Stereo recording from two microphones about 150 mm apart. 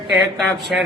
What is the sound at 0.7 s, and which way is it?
Speech, 5° right (ahead or behind).